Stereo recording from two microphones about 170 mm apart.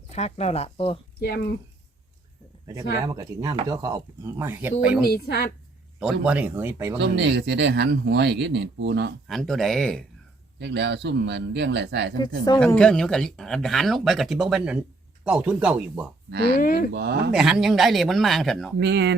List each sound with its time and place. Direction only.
0.1 s speech: 40° left (ahead or behind)
1.2 s speech: 65° left (ahead or behind)
2.6 s speech: 20° right (ahead or behind)
5.0 s a woman's voice: 65° left (ahead or behind)
6.2 s speech: 10° right (ahead or behind)
7.0 s speech: 90° right
9.2 s speech: centre (ahead or behind)
10.6 s speech: 90° right
12.5 s speech: 5° left (ahead or behind)
16.6 s speech: 55° left (ahead or behind)
16.9 s speech: 75° right (ahead or behind)
17.3 s speech: 5° right (ahead or behind)
18.8 s speech: 90° right